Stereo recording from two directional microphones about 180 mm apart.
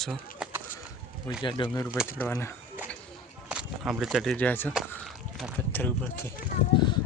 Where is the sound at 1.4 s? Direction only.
25° left (ahead or behind).